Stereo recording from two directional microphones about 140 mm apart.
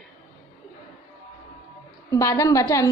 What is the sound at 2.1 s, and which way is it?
Speech, 20° left (ahead or behind).